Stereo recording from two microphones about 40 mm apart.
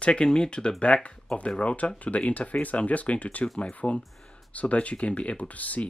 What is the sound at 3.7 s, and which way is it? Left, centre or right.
Speech, left.